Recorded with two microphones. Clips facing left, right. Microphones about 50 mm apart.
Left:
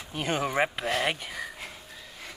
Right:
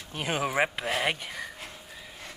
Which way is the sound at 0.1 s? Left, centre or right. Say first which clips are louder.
Left 1 dB; centre.